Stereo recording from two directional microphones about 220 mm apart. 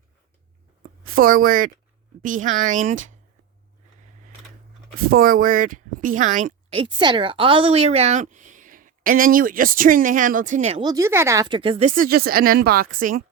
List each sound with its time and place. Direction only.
0.8 s a sound: 40° right (ahead or behind)
2.2 s speech: 35° right (ahead or behind)
5.1 s speech: 40° right (ahead or behind)
10.8 s speech: 15° right (ahead or behind); by 13.2 s 40° right (ahead or behind)